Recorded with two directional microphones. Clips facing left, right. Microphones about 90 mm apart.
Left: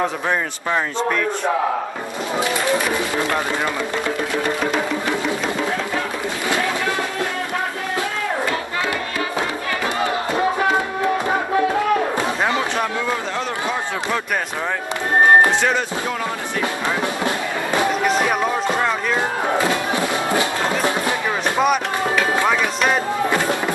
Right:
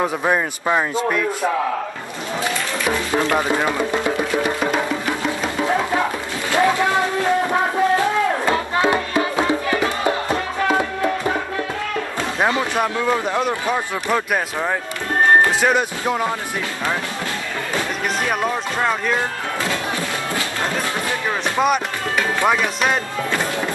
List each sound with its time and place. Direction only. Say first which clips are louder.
0.0 s speech: right 2 dB; 10° right (ahead or behind)
3.3 s speech: right 3 dB; 15° right (ahead or behind)
8.5 s hands: right 5 dB; 25° right (ahead or behind)
12.4 s a sound: right 1 dB; 10° right (ahead or behind)
18.8 s speech: even; 5° right (ahead or behind)
21.5 s music: even; centre (ahead or behind)
22.4 s speech: even; 5° right (ahead or behind)